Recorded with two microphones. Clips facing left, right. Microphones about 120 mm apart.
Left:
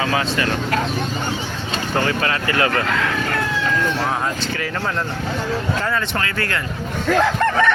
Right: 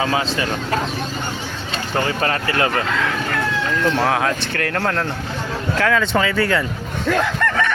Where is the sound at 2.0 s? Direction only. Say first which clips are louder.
Even; 30° right (ahead or behind).